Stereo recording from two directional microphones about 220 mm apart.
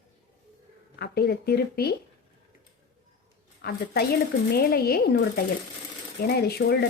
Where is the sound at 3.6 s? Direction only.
45° left (ahead or behind).